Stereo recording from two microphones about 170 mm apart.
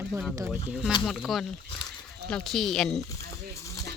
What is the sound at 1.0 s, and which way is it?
Speech, centre (ahead or behind).